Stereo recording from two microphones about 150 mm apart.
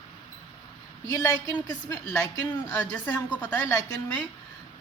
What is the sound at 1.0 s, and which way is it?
A woman's voice, 20° left (ahead or behind).